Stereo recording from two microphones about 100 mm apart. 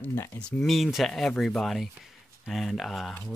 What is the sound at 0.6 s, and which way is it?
Speech, centre (ahead or behind).